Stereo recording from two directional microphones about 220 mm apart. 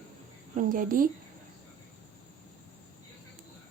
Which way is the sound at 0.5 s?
40° right (ahead or behind).